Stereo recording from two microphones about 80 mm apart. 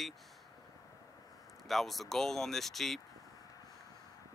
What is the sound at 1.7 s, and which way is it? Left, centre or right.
Speech, centre.